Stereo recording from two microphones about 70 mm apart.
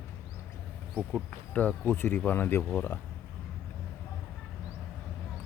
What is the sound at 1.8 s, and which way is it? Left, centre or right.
Speech, left.